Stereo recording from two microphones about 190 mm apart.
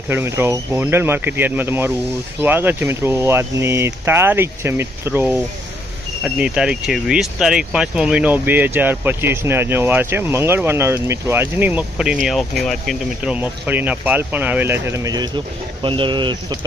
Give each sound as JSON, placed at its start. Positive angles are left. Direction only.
{"t": 0.1, "sound": "speech", "side_deg": -10}